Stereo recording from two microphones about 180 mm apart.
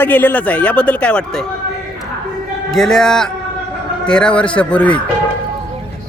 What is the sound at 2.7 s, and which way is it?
A man's voice, 5° left (ahead or behind).